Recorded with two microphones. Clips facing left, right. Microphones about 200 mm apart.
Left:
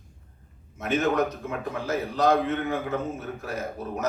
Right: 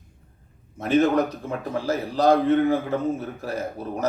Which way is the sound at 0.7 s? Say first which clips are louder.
Right 5 dB; 35° right (ahead or behind).